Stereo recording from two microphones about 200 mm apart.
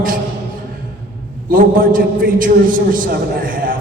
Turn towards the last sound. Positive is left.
turn(degrees=-45)  # may be behind; listen again after turning